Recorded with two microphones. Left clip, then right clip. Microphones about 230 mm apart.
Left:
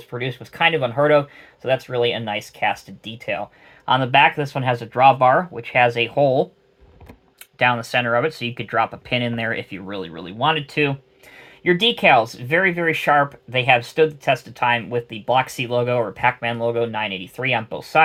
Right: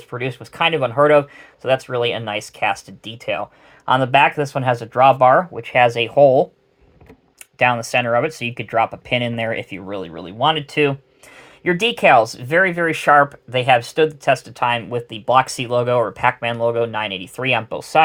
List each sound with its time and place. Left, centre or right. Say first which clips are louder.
0.1 s speech: right 2 dB; right
7.6 s speech: right 2 dB; right